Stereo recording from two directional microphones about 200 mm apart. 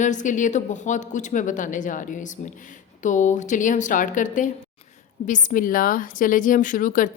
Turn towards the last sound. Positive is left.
turn(degrees=40)  # may be behind; listen again after turning